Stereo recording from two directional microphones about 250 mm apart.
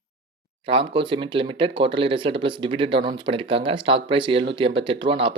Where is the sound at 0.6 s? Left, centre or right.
Right.